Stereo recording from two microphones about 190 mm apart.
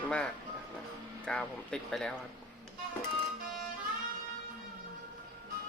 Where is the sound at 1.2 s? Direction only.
5° left (ahead or behind).